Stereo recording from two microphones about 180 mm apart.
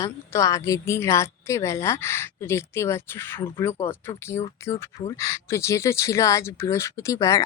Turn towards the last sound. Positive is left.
turn(degrees=15)  # may be behind; listen again after turning